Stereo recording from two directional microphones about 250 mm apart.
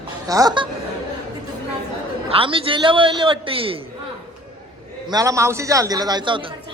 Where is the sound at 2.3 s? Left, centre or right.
Right.